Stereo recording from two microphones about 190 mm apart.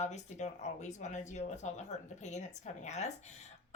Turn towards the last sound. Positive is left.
turn(degrees=35)  # may be behind; listen again after turning